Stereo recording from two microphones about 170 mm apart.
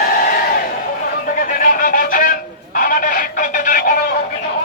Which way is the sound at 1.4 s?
55° left (ahead or behind).